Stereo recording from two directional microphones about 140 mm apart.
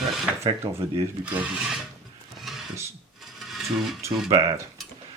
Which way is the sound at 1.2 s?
5° right (ahead or behind).